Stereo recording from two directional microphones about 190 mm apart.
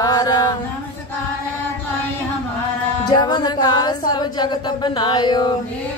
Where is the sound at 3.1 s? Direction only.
20° left (ahead or behind).